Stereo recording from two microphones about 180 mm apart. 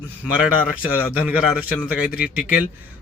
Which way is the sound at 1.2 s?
10° right (ahead or behind).